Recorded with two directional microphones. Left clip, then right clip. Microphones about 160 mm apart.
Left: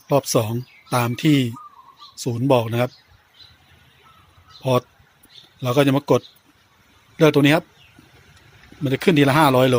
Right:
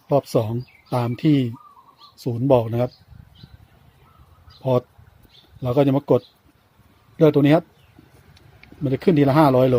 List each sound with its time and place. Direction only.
0.1 s speech: 5° left (ahead or behind)
4.6 s speech: 5° left (ahead or behind)
8.8 s speech: 5° left (ahead or behind)